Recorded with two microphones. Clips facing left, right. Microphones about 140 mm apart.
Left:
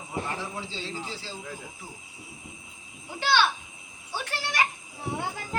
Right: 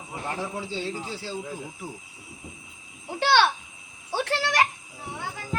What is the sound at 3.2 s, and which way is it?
Speech, 75° right (ahead or behind).